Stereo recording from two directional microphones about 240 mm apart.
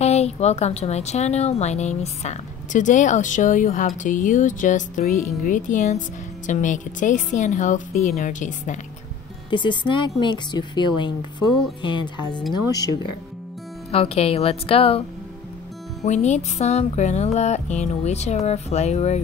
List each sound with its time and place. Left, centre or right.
0.0 s speech: left
9.5 s music: centre
13.9 s music: left